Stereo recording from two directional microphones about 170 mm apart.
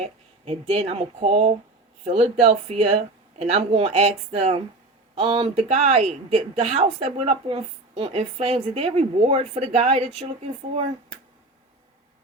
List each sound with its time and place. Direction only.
0.0 s speech: 40° right (ahead or behind)